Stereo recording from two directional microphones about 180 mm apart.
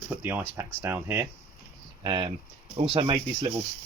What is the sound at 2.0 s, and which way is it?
Speech, 25° right (ahead or behind).